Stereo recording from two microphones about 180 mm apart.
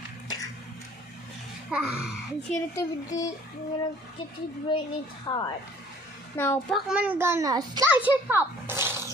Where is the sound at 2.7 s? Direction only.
20° left (ahead or behind).